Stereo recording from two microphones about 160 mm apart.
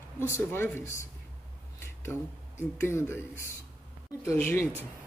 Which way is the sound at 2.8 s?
15° left (ahead or behind).